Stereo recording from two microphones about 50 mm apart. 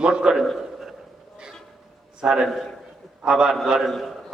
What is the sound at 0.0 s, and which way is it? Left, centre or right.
Speech, centre.